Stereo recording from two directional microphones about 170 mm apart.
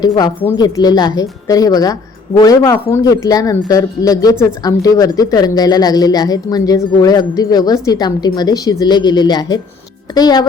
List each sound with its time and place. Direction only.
0.5 s speech: 25° left (ahead or behind)